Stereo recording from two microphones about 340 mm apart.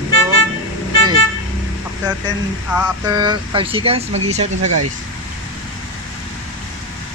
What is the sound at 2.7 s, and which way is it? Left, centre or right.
Speech, centre.